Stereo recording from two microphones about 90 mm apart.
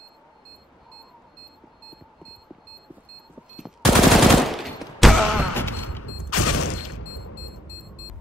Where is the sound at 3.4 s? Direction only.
5° right (ahead or behind).